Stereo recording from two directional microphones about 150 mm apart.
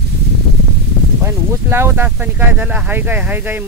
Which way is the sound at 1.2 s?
15° right (ahead or behind).